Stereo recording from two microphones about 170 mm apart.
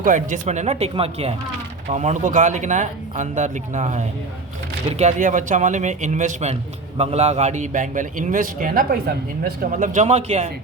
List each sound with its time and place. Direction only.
0.0 s a man's voice: 50° right (ahead or behind)